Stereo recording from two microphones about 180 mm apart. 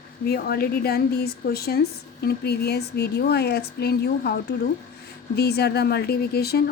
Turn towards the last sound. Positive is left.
turn(degrees=60)  # may be behind; listen again after turning